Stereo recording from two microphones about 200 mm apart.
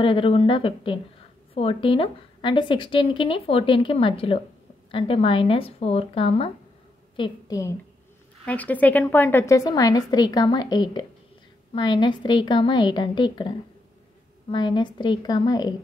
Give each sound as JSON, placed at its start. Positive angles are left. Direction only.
{"t": 0.0, "sound": "a woman's voice", "side_deg": 25}